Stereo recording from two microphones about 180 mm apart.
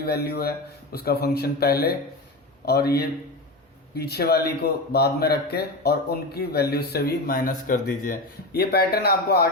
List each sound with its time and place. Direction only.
0.0 s a man's voice: 60° left (ahead or behind)